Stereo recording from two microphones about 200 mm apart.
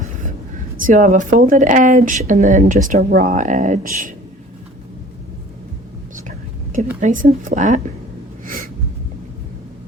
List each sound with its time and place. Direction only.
0.8 s speech: 40° right (ahead or behind)
7.0 s speech: 40° right (ahead or behind)
8.4 s gasp: 45° right (ahead or behind)